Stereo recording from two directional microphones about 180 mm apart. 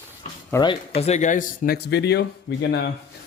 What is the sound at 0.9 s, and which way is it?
Speech, 35° left (ahead or behind).